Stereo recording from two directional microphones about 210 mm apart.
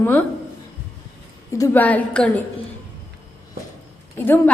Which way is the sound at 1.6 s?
10° left (ahead or behind).